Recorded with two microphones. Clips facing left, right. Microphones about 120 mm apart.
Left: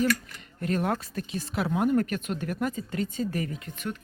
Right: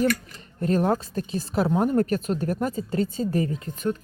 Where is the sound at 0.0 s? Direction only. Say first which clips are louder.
Right 3 dB; 35° right (ahead or behind).